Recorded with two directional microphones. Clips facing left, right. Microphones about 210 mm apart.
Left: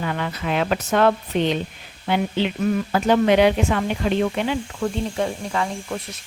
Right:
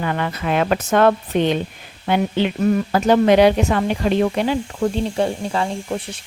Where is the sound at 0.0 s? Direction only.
55° right (ahead or behind).